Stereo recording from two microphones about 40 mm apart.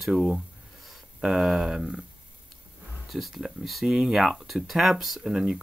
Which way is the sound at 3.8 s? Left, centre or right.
Centre.